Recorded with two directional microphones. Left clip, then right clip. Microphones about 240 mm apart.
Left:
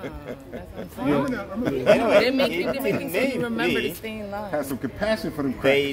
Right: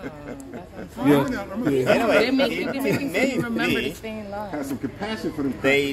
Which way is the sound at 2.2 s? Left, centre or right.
Left.